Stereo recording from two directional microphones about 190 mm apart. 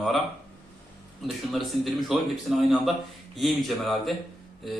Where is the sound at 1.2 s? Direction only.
Centre (ahead or behind).